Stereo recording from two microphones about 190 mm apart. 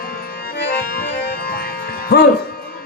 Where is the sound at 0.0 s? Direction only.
50° left (ahead or behind).